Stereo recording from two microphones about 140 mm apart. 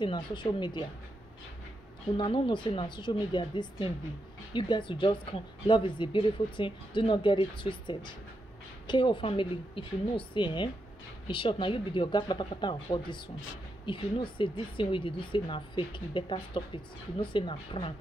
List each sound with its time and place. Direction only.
0.0 s speech: 35° left (ahead or behind)
2.1 s speech: 40° left (ahead or behind)